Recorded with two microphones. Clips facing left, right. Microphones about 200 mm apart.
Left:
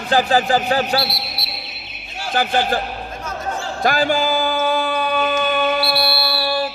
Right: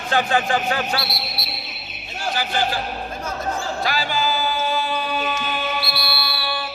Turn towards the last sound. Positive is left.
turn(degrees=40)  # may be behind; listen again after turning